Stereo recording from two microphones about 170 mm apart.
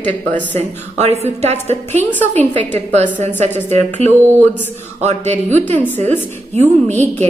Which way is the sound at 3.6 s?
40° right (ahead or behind).